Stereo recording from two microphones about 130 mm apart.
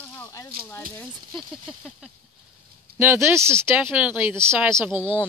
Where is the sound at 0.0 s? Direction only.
20° left (ahead or behind).